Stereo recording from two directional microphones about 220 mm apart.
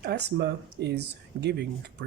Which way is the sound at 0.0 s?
50° right (ahead or behind).